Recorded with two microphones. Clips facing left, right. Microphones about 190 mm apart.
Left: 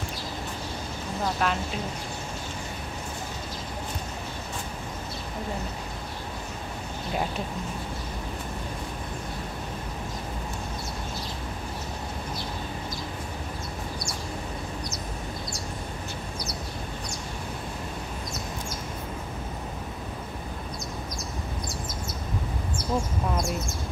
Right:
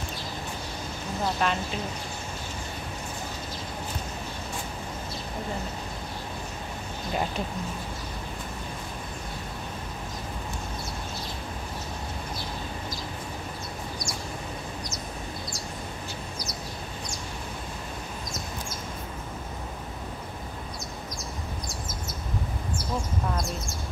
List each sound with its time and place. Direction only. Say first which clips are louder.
1.4 s speech: even; 5° left (ahead or behind)